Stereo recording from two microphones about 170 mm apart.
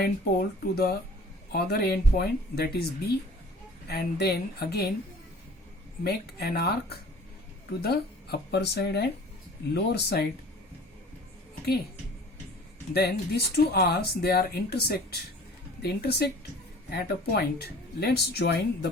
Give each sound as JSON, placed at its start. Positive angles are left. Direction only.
{"t": 0.0, "sound": "speech", "side_deg": 60}
{"t": 6.0, "sound": "speech", "side_deg": 65}
{"t": 12.9, "sound": "speech", "side_deg": 70}